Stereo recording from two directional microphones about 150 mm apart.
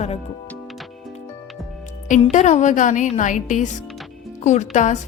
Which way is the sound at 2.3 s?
55° left (ahead or behind).